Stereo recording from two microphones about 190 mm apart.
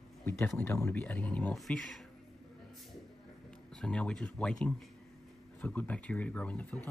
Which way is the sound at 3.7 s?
5° left (ahead or behind).